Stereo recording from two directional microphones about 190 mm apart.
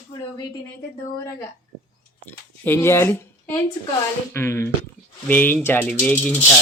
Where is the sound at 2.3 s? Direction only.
10° left (ahead or behind).